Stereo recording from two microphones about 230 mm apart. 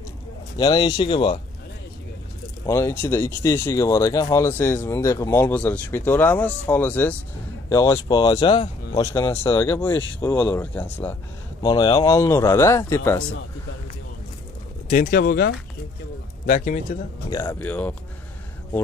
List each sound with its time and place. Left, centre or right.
0.6 s speech: centre
2.6 s speech: centre
11.6 s speech: centre
14.9 s speech: left
17.3 s speech: centre